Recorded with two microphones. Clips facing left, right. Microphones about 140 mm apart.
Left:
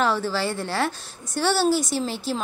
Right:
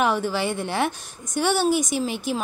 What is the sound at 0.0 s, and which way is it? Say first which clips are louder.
Speech: right 1 dB; 15° right (ahead or behind).